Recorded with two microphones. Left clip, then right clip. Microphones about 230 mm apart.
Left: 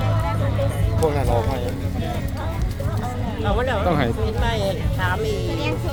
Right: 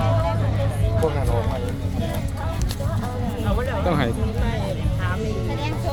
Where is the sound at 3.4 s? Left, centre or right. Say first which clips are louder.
Left 6 dB; left.